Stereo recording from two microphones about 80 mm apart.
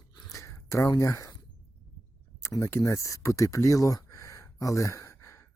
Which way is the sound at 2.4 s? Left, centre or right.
Left.